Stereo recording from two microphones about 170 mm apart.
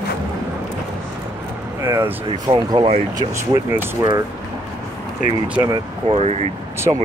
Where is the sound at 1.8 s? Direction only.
20° right (ahead or behind).